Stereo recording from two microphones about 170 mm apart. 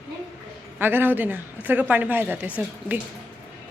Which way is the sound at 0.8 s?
10° right (ahead or behind).